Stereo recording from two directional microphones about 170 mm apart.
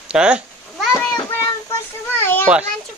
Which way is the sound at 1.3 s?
20° left (ahead or behind).